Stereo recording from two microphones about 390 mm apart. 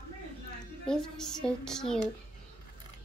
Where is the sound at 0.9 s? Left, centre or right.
Centre.